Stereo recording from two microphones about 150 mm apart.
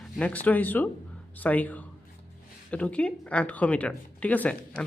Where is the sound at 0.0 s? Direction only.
10° left (ahead or behind).